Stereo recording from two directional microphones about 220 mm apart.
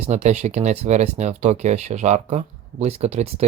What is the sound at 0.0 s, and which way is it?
Speech, 30° right (ahead or behind).